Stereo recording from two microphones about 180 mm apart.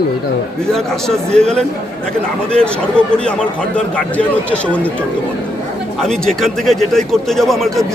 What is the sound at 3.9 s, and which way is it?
Speech, 5° left (ahead or behind).